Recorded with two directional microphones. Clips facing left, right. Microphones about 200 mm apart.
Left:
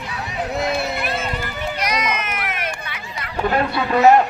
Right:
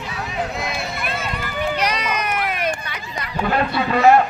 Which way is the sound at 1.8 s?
35° right (ahead or behind).